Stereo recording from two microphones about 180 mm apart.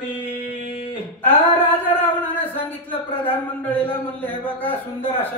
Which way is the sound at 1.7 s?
10° left (ahead or behind).